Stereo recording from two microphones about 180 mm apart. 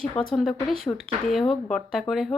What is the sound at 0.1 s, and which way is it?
Speech, 25° left (ahead or behind).